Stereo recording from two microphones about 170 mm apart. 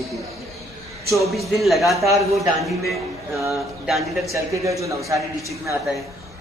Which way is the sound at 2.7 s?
Centre (ahead or behind).